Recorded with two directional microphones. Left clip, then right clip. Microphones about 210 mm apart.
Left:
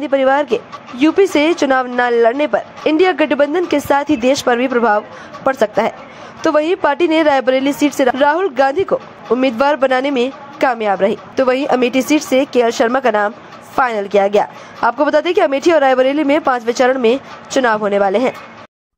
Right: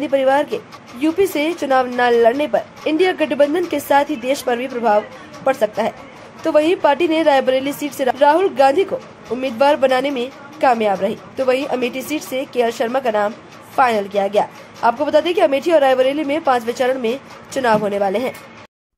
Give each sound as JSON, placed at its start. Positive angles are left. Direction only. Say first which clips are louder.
{"t": 0.0, "sound": "a woman's voice", "louder": "left 2 dB", "side_deg": 15}